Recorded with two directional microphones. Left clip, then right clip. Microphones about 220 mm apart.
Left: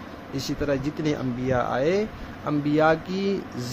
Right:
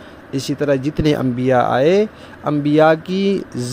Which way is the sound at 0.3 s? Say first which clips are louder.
Right 9 dB; 35° right (ahead or behind).